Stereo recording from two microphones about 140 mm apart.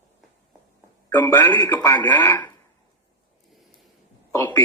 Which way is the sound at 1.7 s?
30° left (ahead or behind).